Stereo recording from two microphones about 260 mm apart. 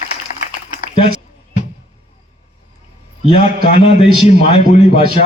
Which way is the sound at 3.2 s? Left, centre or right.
Left.